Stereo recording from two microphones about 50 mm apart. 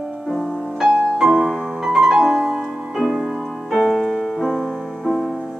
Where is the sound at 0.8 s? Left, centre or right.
Centre.